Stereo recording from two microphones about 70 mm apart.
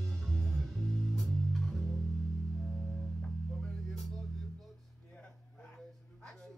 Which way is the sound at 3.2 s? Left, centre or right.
Centre.